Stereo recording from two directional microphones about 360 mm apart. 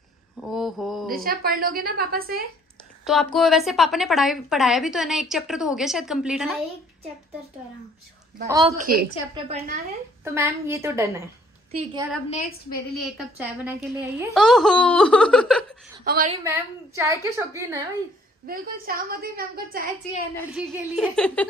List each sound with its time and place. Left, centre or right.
0.4 s mantra: centre
1.1 s a woman's voice: right
3.3 s a woman's voice: centre
8.5 s a woman's voice: centre
10.2 s a woman's voice: centre
12.9 s a woman's voice: centre
16.0 s a woman's voice: right
16.4 s a woman's voice: centre
18.5 s a woman's voice: right
20.5 s a woman's voice: centre